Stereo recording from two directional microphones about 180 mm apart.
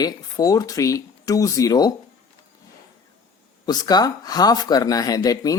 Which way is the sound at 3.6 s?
20° left (ahead or behind).